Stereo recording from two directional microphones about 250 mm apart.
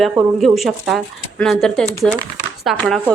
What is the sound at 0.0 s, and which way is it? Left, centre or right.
Speech, centre.